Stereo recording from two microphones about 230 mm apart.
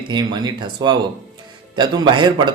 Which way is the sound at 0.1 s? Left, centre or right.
Centre.